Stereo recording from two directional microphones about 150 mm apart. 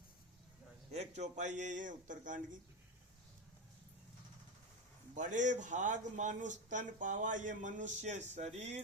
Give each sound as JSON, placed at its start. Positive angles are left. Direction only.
{"t": 0.9, "sound": "a man's voice", "side_deg": -50}
{"t": 5.1, "sound": "speech", "side_deg": -55}